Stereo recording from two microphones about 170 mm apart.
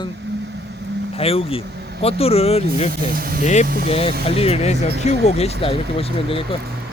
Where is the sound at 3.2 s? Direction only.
60° right (ahead or behind).